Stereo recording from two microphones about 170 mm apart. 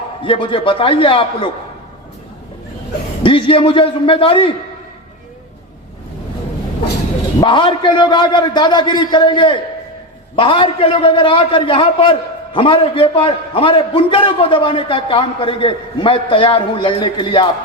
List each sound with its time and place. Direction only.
0.3 s a man's voice: 30° left (ahead or behind)
3.2 s a man's voice: 30° left (ahead or behind)
7.4 s a man's voice: 30° left (ahead or behind)